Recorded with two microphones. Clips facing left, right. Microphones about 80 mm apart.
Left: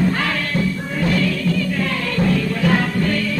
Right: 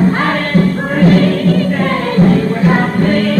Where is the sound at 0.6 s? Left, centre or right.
Right.